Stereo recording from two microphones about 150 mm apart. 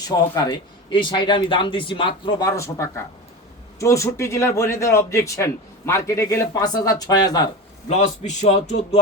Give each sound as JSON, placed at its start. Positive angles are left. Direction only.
{"t": 0.1, "sound": "a man's voice", "side_deg": 25}
{"t": 7.9, "sound": "speech", "side_deg": 50}